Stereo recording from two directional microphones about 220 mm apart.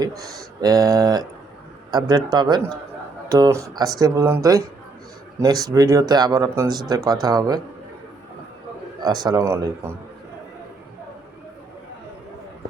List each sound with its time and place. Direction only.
0.6 s speech: 15° right (ahead or behind)
9.0 s speech: 20° right (ahead or behind)